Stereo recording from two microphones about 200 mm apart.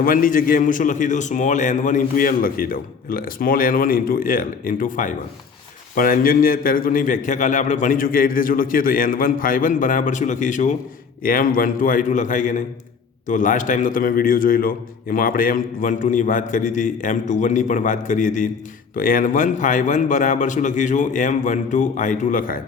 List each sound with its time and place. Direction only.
0.0 s a man's voice: 45° left (ahead or behind)